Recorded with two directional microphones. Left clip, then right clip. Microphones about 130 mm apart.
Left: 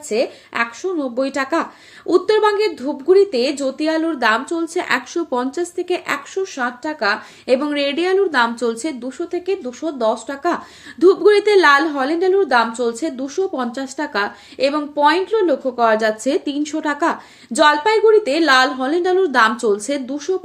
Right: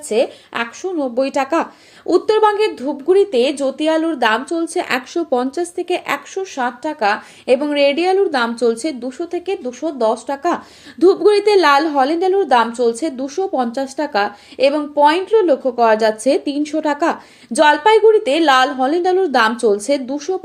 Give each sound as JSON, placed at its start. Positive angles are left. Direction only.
{"t": 0.1, "sound": "speech", "side_deg": -40}
{"t": 11.0, "sound": "a woman's voice", "side_deg": -20}